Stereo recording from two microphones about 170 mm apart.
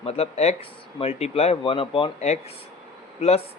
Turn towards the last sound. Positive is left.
turn(degrees=40)  # may be behind; listen again after turning